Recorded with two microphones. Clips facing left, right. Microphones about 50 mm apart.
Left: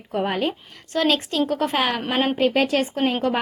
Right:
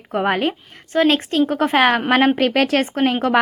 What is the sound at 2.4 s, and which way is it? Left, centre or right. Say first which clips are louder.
Speech: right 3 dB; right.